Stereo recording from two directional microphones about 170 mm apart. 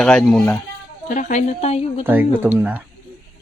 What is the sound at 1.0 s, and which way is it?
A woman's voice, 45° left (ahead or behind).